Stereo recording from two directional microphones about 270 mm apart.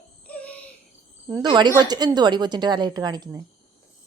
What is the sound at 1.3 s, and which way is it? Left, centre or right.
A woman's voice, centre.